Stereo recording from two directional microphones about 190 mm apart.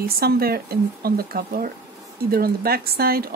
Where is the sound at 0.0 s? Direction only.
55° right (ahead or behind).